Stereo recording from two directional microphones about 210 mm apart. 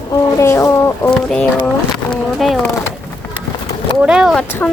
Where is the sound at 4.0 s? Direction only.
5° right (ahead or behind).